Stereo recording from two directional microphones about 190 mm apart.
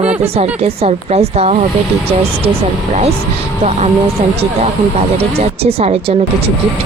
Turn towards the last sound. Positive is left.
turn(degrees=-35)  # may be behind; listen again after turning